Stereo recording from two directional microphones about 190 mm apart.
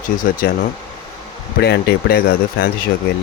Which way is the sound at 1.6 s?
60° left (ahead or behind).